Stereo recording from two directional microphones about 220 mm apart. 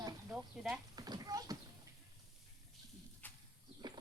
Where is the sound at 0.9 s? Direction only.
15° right (ahead or behind).